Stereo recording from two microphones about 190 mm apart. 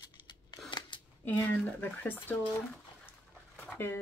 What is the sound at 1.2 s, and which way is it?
Speech, 10° left (ahead or behind).